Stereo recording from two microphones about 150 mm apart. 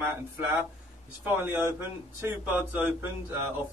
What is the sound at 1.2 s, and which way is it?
Speech, 15° right (ahead or behind).